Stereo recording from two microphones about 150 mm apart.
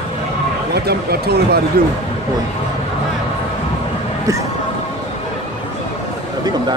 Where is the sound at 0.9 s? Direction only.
90° right.